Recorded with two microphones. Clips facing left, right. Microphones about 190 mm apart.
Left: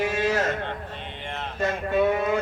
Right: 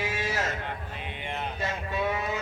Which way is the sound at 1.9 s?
55° left (ahead or behind).